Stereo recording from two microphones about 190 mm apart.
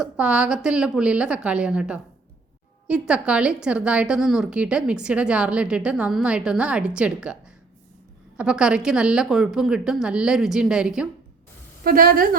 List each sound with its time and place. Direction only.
0.0 s a woman's voice: 5° right (ahead or behind)
8.4 s a woman's voice: 5° right (ahead or behind)
11.8 s a woman's voice: 50° right (ahead or behind)